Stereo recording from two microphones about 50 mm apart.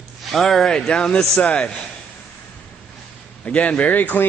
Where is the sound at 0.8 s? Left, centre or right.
Left.